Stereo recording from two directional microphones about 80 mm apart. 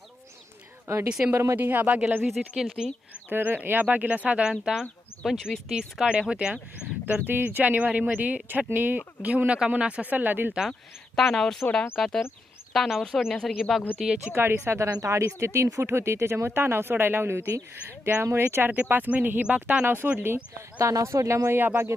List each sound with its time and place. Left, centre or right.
1.0 s speech: centre
1.3 s speech: right
1.5 s speech: right
3.2 s speech: right
7.0 s speech: right
10.7 s speech: centre
13.6 s speech: centre
14.3 s speech: right